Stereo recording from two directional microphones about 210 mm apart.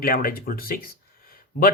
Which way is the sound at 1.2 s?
45° left (ahead or behind).